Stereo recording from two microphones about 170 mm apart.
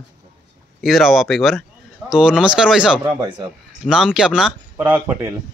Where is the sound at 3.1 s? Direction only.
25° right (ahead or behind).